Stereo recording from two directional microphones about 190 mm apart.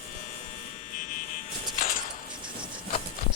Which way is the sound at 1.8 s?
45° left (ahead or behind).